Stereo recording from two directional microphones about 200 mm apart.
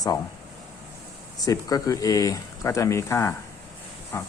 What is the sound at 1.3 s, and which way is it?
Speech, 20° left (ahead or behind).